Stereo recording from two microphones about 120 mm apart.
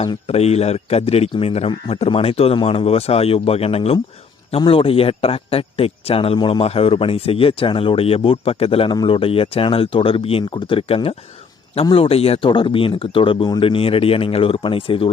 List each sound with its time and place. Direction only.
0.3 s speech: 60° left (ahead or behind)